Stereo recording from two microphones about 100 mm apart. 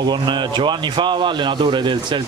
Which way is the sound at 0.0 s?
50° right (ahead or behind).